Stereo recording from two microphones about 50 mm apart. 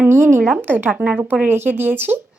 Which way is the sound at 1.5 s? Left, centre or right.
Right.